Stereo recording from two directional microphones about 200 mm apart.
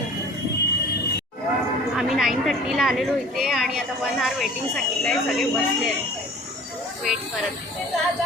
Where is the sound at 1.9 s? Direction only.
Centre (ahead or behind).